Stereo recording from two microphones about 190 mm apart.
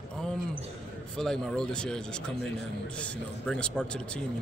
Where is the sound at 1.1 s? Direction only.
5° left (ahead or behind).